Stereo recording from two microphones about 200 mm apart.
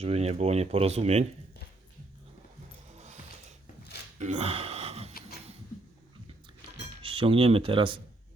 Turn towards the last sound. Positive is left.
turn(degrees=-25)  # may be behind; listen again after turning